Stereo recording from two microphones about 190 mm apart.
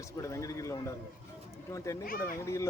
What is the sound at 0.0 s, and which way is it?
A child's voice, 15° left (ahead or behind).